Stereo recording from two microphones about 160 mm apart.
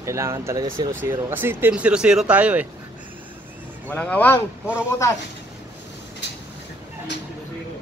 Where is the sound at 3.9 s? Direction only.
10° left (ahead or behind).